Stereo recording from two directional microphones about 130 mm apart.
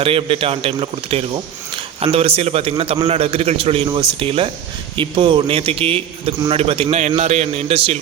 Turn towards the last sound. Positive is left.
turn(degrees=-45)  # may be behind; listen again after turning